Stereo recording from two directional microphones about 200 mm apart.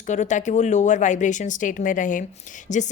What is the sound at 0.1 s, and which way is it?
A woman's voice, 35° left (ahead or behind).